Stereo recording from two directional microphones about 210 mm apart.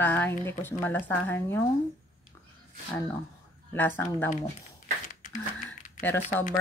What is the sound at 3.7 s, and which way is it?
Speech, 10° left (ahead or behind).